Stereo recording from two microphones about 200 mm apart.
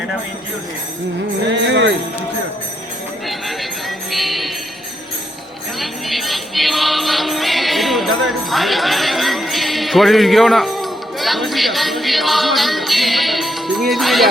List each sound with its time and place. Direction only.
1.6 s speech: 65° right (ahead or behind)
3.2 s jingle bell: centre (ahead or behind)
5.8 s music: centre (ahead or behind)